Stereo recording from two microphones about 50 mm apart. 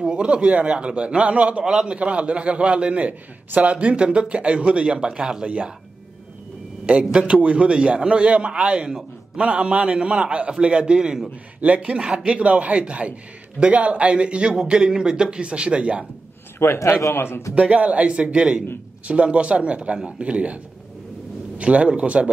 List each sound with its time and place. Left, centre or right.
0.0 s a man's voice: right
1.6 s a man's voice: centre
2.0 s a man's voice: right
6.9 s a man's voice: right
11.6 s a man's voice: right
16.5 s a man's voice: left
17.6 s a man's voice: right